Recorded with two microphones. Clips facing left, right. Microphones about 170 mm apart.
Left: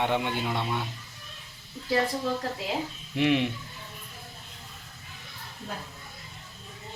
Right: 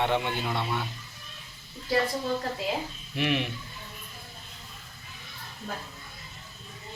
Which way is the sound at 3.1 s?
20° left (ahead or behind).